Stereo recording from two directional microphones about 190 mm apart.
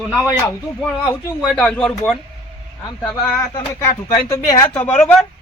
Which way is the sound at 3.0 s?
20° left (ahead or behind).